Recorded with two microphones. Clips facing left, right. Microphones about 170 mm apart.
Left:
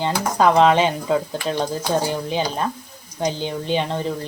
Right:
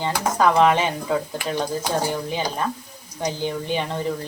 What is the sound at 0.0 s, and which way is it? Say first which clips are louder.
Speech: left 2 dB; 20° left (ahead or behind).